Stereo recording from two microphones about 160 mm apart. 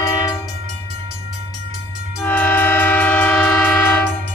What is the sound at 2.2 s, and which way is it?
Train, 10° left (ahead or behind).